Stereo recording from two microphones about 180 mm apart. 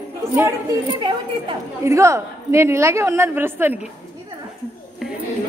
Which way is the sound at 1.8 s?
15° right (ahead or behind).